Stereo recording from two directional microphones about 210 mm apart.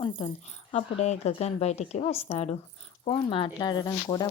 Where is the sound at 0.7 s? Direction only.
30° left (ahead or behind).